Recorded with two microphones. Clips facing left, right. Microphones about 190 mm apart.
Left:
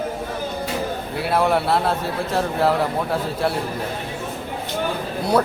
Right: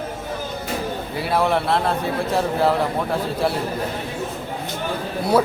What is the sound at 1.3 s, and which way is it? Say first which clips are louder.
Speech: left 1 dB; centre (ahead or behind).